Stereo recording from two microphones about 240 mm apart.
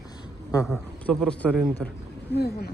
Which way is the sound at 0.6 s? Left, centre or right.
Centre.